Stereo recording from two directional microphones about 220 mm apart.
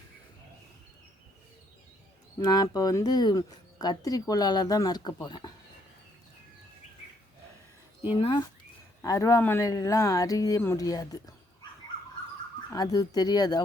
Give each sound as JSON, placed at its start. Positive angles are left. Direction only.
{"t": 2.4, "sound": "speech", "side_deg": 20}
{"t": 8.1, "sound": "speech", "side_deg": 20}
{"t": 12.7, "sound": "speech", "side_deg": 15}